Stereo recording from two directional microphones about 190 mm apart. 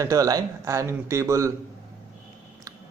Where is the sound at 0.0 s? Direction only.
15° right (ahead or behind).